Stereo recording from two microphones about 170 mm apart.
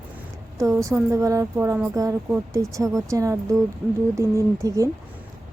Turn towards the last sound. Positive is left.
turn(degrees=-20)  # may be behind; listen again after turning